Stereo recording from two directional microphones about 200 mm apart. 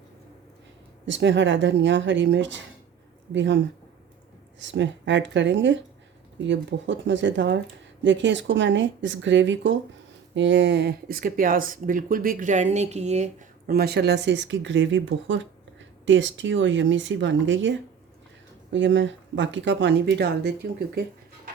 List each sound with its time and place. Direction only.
1.0 s speech: 65° right (ahead or behind)
4.6 s speech: 65° right (ahead or behind); by 13.3 s 35° right (ahead or behind)
13.7 s speech: 50° right (ahead or behind)